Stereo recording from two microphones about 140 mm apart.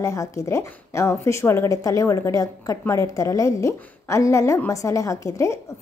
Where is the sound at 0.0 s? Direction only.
25° left (ahead or behind).